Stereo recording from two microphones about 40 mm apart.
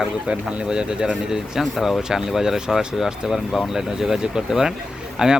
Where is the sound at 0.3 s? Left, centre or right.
Right.